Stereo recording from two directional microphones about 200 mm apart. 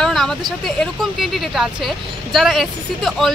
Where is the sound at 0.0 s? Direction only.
Centre (ahead or behind).